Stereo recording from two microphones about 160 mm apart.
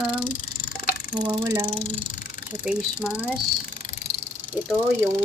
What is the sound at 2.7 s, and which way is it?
Speech, 5° right (ahead or behind).